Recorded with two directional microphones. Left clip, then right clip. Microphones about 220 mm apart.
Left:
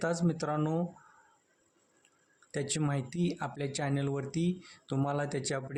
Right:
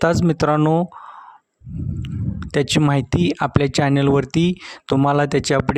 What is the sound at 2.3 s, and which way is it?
Speech, 45° right (ahead or behind).